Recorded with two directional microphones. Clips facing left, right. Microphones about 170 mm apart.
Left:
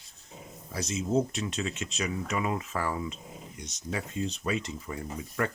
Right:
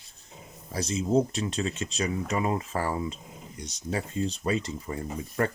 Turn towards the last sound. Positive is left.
turn(degrees=-35)  # may be behind; listen again after turning